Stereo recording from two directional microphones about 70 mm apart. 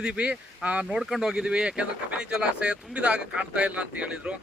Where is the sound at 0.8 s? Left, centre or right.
Centre.